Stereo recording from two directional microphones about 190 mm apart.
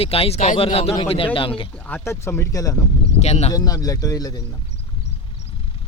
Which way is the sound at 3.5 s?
20° left (ahead or behind).